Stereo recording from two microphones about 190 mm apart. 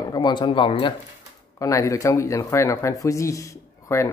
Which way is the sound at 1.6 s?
15° left (ahead or behind).